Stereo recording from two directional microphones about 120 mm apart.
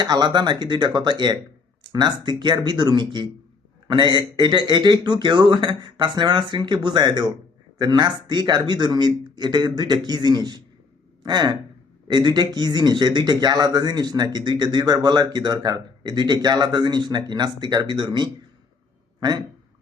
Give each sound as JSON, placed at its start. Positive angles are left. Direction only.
{"t": 0.0, "sound": "speech", "side_deg": -35}